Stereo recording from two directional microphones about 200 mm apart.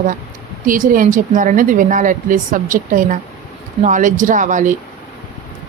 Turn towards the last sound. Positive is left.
turn(degrees=-40)  # may be behind; listen again after turning